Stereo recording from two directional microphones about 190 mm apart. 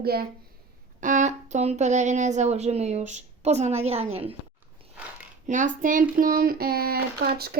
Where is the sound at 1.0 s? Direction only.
40° right (ahead or behind).